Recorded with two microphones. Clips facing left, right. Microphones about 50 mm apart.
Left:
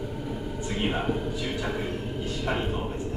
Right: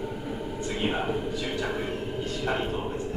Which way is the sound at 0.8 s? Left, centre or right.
Centre.